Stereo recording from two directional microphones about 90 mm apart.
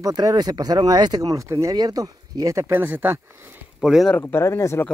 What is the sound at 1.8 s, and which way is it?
Speech, 45° right (ahead or behind).